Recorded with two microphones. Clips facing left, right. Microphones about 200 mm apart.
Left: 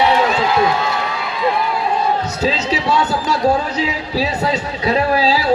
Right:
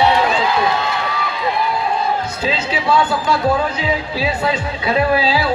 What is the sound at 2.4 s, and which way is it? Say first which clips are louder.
Speech: left 2 dB; 40° left (ahead or behind).